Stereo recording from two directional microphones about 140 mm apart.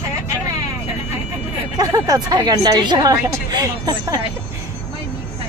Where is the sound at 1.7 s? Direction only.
25° right (ahead or behind).